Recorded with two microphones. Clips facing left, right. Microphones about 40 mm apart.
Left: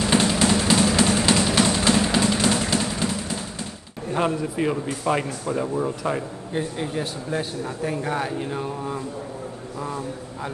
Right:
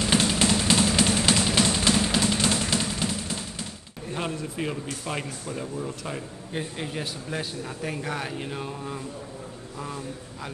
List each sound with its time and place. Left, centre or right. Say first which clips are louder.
0.0 s music: left 3 dB; left
4.1 s a sound: left 8 dB; left
4.8 s a man's voice: left 8 dB; left
6.5 s a man's voice: left 5 dB; centre
8.0 s speech: left 6 dB; centre